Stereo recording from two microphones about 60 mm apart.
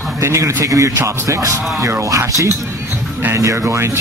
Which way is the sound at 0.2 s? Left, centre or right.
Right.